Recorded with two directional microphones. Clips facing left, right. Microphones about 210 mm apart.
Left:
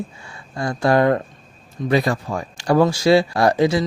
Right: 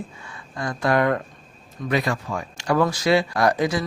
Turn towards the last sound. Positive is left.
turn(degrees=25)  # may be behind; listen again after turning